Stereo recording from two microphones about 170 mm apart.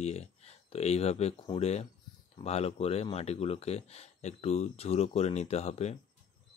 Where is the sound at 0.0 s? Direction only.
40° left (ahead or behind).